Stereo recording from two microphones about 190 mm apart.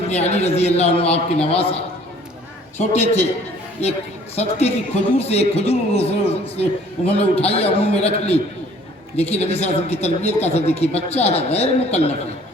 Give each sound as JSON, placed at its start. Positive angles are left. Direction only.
{"t": 0.1, "sound": "a man's voice", "side_deg": 35}
{"t": 2.7, "sound": "a man's voice", "side_deg": 35}
{"t": 4.4, "sound": "a man's voice", "side_deg": 35}